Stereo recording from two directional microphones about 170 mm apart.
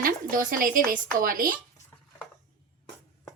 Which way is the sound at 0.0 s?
55° right (ahead or behind).